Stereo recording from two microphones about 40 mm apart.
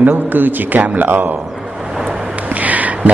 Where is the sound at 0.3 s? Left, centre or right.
Right.